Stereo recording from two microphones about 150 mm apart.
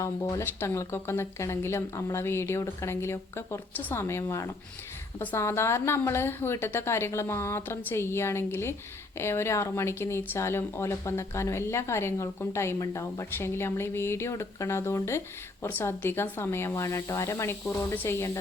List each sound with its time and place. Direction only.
0.0 s speech: 20° left (ahead or behind)